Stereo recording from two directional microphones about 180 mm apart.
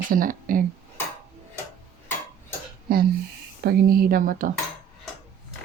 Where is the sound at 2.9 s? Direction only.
55° right (ahead or behind).